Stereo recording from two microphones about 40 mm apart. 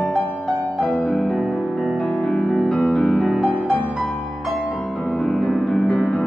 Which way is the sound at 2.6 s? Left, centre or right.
Left.